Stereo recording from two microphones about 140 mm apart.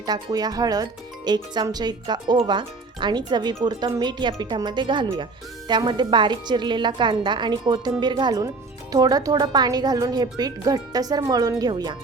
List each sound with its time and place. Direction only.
0.0 s a woman's voice: 30° right (ahead or behind)